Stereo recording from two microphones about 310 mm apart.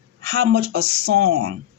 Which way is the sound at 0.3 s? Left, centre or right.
Right.